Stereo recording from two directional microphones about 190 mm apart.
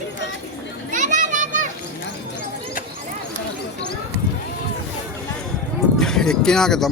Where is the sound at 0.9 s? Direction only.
40° right (ahead or behind).